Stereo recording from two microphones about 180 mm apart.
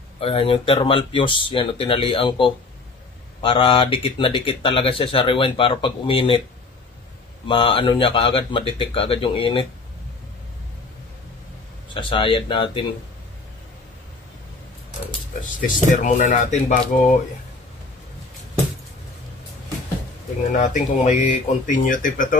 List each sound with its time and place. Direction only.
0.2 s speech: 30° left (ahead or behind)
7.4 s speech: 30° left (ahead or behind)
11.9 s speech: 30° left (ahead or behind)
15.6 s speech: 45° left (ahead or behind)
20.5 s speech: 40° left (ahead or behind)